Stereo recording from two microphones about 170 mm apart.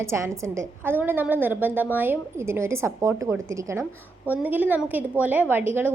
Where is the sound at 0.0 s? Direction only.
15° right (ahead or behind).